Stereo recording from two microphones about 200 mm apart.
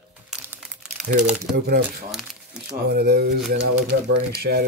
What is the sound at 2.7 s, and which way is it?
Speech, 55° right (ahead or behind).